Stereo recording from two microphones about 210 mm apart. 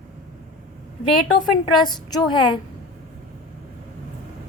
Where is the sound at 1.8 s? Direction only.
20° left (ahead or behind).